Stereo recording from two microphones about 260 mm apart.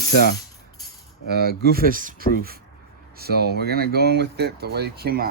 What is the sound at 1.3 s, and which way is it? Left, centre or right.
Speech, right.